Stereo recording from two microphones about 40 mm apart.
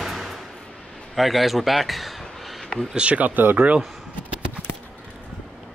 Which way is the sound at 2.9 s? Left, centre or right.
Right.